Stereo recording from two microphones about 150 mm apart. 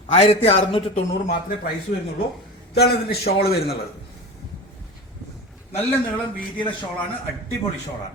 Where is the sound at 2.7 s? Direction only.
90° left.